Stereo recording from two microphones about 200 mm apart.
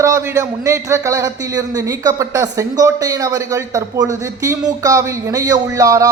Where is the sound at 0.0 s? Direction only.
15° right (ahead or behind).